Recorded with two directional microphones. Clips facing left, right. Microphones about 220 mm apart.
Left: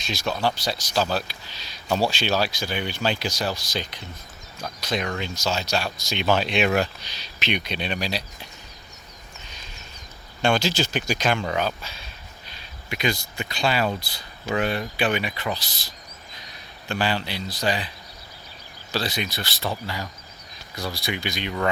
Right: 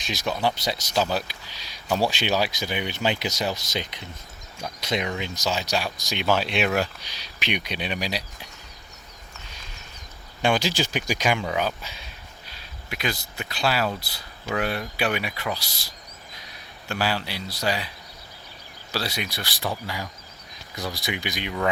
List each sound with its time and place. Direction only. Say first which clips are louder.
0.0 s speech: even; 15° right (ahead or behind)
10.4 s speech: left 1 dB; 15° right (ahead or behind)
12.5 s speech: left 3 dB; 5° right (ahead or behind)